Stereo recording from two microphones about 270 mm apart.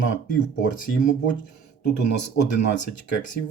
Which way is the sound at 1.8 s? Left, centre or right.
Left.